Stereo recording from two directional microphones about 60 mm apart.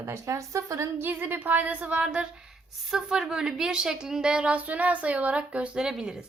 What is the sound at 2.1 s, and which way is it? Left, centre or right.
A woman's voice, centre.